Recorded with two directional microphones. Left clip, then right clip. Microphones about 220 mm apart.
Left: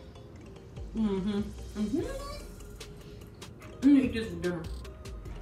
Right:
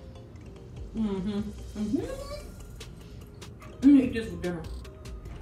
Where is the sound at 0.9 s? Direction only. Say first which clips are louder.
Even; centre (ahead or behind).